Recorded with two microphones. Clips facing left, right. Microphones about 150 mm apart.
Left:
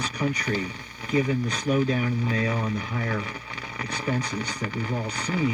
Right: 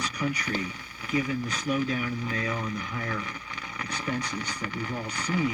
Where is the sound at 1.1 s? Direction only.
35° left (ahead or behind).